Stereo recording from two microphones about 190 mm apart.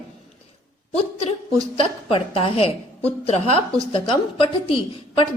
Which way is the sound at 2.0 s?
30° left (ahead or behind).